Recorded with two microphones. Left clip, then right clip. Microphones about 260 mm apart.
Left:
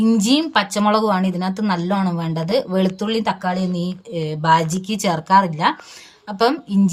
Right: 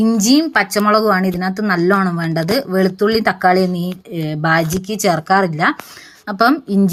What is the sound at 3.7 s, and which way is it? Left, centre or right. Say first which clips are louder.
Speech: right 2 dB; right.